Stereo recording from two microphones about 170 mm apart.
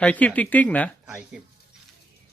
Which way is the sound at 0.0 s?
10° left (ahead or behind).